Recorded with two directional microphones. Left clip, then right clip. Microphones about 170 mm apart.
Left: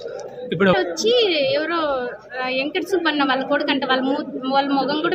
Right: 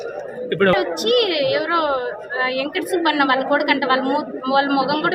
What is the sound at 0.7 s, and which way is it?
A woman's voice, 5° left (ahead or behind).